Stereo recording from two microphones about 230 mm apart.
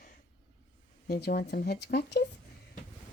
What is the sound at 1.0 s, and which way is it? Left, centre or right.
Speech, left.